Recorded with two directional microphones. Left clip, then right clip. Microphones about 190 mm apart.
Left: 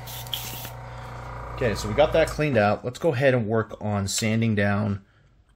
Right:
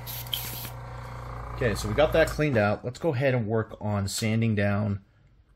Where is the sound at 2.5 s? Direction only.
5° left (ahead or behind).